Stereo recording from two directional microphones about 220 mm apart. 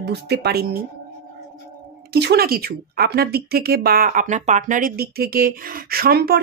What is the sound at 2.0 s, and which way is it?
Speech, 45° right (ahead or behind).